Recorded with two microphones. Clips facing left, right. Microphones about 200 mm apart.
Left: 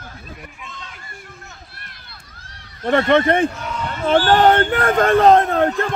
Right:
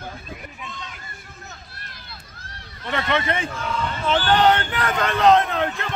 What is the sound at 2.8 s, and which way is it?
Speech, 50° left (ahead or behind).